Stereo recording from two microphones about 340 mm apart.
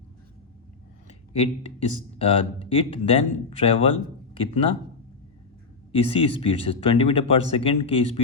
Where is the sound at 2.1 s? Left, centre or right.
Centre.